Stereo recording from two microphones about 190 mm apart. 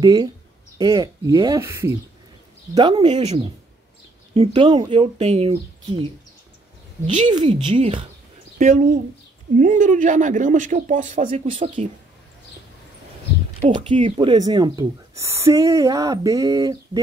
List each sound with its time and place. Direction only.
0.0 s speech: 20° right (ahead or behind)
2.7 s speech: 25° right (ahead or behind)
7.2 s speech: 25° right (ahead or behind)
8.5 s speech: 40° right (ahead or behind)
13.6 s speech: 30° right (ahead or behind)